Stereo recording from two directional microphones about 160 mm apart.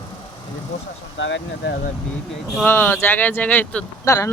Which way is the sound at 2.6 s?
15° left (ahead or behind).